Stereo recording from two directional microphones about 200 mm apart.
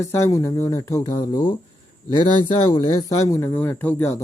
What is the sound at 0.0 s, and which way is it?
Speech, 15° left (ahead or behind).